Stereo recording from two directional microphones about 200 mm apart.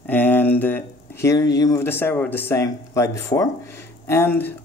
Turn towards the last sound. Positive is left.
turn(degrees=10)  # may be behind; listen again after turning